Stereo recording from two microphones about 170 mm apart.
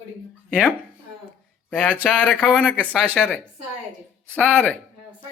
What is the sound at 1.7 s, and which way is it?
Speech, 10° left (ahead or behind).